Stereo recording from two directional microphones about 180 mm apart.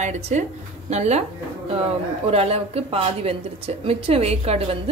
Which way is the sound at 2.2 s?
35° right (ahead or behind).